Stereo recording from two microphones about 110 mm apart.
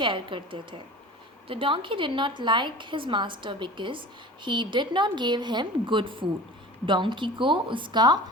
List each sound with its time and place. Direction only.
0.0 s a woman's voice: 50° right (ahead or behind)